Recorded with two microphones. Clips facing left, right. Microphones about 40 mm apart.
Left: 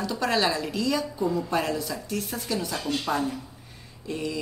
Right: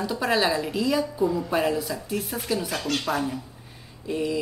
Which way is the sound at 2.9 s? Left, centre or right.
Right.